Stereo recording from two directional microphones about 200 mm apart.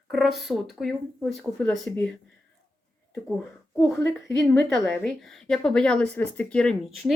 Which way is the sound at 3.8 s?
15° left (ahead or behind).